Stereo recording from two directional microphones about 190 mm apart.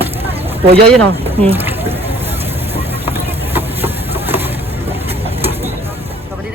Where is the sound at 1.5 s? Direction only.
10° right (ahead or behind).